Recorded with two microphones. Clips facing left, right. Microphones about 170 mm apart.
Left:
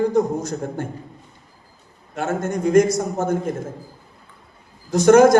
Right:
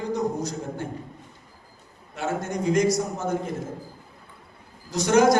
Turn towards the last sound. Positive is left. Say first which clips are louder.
# left 7 dB
turn(degrees=50)  # may be behind; listen again after turning